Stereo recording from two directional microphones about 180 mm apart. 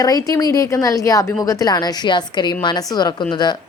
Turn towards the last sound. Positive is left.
turn(degrees=25)  # may be behind; listen again after turning